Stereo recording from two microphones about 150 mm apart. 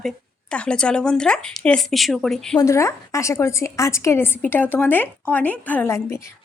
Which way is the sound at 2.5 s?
20° left (ahead or behind).